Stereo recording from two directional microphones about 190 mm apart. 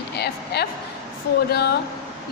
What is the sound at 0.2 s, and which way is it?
Speech, 60° left (ahead or behind).